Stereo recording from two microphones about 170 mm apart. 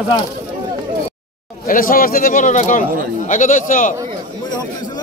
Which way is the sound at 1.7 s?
55° left (ahead or behind).